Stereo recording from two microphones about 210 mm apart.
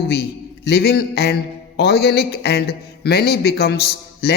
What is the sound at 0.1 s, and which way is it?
A man's voice, 50° left (ahead or behind).